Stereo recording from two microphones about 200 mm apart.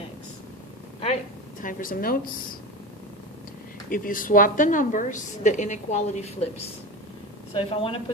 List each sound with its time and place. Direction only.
1.6 s a woman's voice: 45° left (ahead or behind)
3.8 s a woman's voice: 45° left (ahead or behind)
7.5 s speech: 30° left (ahead or behind)